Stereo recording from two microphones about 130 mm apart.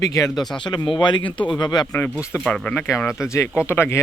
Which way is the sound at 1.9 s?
15° left (ahead or behind).